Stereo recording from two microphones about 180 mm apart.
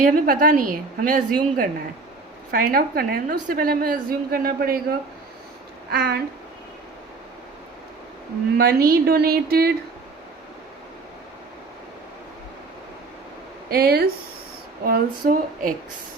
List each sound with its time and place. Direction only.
0.0 s a woman's voice: 50° right (ahead or behind)
8.5 s a woman's voice: 55° right (ahead or behind)
13.7 s a woman's voice: 60° right (ahead or behind)